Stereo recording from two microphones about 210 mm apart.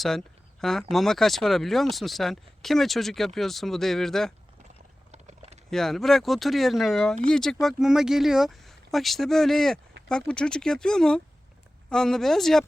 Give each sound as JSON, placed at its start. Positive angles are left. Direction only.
{"t": 0.6, "sound": "speech", "side_deg": 0}
{"t": 5.1, "sound": "typing", "side_deg": -30}
{"t": 5.7, "sound": "speech", "side_deg": 0}